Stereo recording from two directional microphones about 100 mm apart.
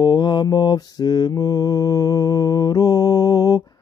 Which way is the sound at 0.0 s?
45° left (ahead or behind).